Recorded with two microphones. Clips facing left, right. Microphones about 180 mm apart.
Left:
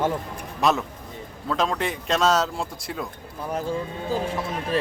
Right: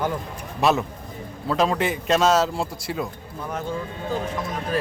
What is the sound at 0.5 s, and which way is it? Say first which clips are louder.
A man's voice: right 2 dB; centre (ahead or behind).